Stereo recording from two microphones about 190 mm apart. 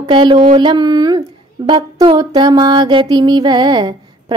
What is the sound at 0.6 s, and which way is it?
Music, 25° right (ahead or behind).